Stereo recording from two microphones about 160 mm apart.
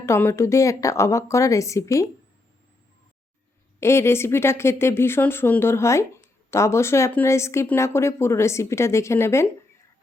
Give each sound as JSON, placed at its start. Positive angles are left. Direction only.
{"t": 0.0, "sound": "a woman's voice", "side_deg": 15}
{"t": 3.8, "sound": "speech", "side_deg": 15}